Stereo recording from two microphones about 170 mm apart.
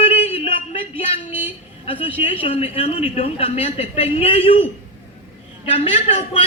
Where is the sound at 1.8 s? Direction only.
35° left (ahead or behind).